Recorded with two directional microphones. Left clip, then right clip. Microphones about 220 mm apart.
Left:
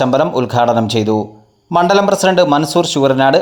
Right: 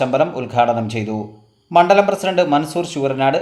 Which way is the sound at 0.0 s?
35° left (ahead or behind).